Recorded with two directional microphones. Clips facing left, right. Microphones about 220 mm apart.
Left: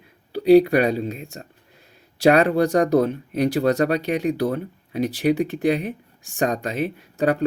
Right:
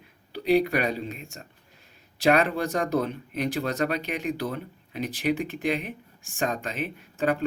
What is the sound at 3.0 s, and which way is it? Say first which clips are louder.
Speech: left 8 dB; 40° left (ahead or behind).